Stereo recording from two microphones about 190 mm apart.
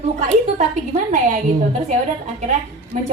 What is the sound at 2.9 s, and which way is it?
Speech, 35° right (ahead or behind).